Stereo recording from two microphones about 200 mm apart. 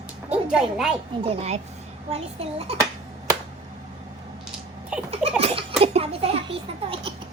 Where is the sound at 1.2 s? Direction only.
30° right (ahead or behind).